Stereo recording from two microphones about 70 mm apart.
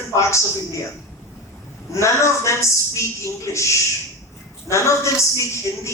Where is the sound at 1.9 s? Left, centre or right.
Left.